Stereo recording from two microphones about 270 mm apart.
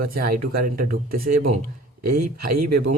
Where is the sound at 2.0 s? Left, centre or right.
Right.